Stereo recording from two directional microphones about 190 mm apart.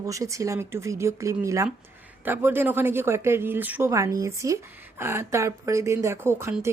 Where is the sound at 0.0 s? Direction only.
15° right (ahead or behind).